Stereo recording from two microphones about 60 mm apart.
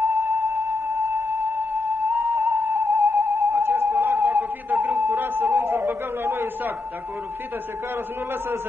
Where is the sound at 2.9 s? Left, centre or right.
Centre.